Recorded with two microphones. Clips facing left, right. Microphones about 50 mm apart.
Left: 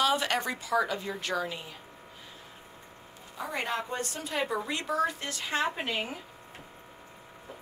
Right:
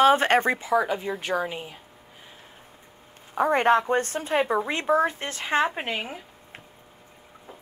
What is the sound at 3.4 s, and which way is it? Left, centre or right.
Speech, right.